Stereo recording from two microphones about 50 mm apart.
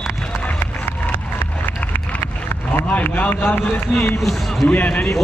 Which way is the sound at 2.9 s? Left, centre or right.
Left.